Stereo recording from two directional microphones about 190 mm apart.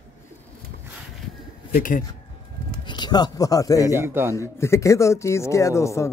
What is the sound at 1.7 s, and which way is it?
Speech, 45° left (ahead or behind).